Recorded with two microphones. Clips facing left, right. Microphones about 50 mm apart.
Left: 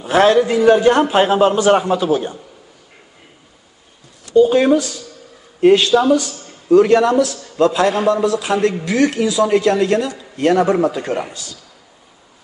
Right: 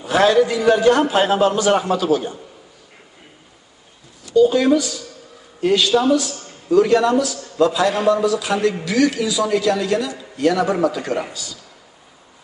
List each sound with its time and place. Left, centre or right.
0.0 s a man's voice: left
1.8 s a man's voice: centre
2.0 s a man's voice: left
4.4 s a man's voice: left